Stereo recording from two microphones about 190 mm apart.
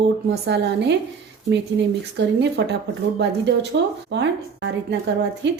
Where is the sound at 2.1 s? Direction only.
65° right (ahead or behind).